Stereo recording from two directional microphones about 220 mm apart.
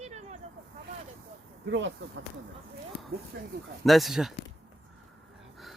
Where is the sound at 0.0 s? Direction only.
30° right (ahead or behind).